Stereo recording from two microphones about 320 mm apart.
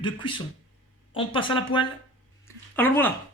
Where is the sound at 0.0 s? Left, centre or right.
Centre.